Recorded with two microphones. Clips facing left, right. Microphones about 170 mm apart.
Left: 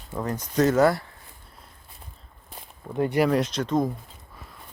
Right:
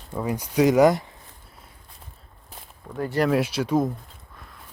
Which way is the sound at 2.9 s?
5° left (ahead or behind).